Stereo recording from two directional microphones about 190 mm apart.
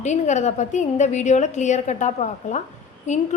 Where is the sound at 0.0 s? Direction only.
40° left (ahead or behind).